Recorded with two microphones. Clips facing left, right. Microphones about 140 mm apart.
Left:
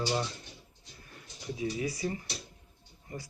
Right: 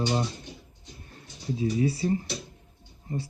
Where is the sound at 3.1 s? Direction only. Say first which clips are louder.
Right 9 dB; 30° right (ahead or behind).